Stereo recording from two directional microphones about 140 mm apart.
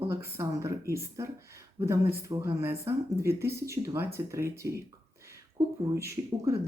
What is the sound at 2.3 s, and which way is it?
Speech, 20° right (ahead or behind).